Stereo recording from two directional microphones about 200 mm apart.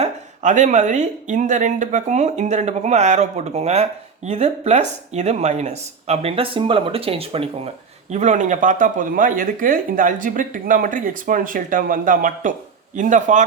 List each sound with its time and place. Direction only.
0.0 s speech: 35° right (ahead or behind)